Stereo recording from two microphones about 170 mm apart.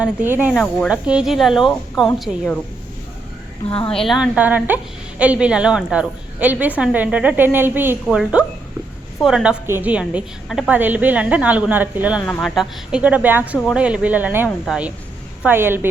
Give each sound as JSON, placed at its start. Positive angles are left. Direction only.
{"t": 0.0, "sound": "a woman's voice", "side_deg": -10}
{"t": 0.5, "sound": "speech", "side_deg": 5}
{"t": 0.9, "sound": "speech", "side_deg": -5}
{"t": 3.8, "sound": "a woman's voice", "side_deg": 0}
{"t": 12.2, "sound": "a woman's voice", "side_deg": 5}